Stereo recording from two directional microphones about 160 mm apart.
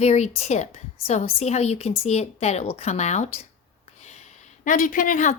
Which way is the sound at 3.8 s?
45° left (ahead or behind).